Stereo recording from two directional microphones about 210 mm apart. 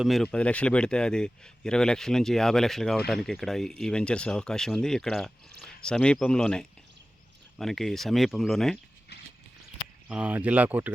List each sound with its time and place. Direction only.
0.0 s speech: centre (ahead or behind)
10.1 s speech: 5° right (ahead or behind)